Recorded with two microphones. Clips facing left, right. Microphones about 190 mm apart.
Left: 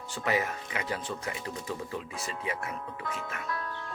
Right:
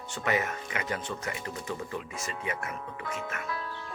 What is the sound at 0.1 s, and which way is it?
Speech, 35° left (ahead or behind).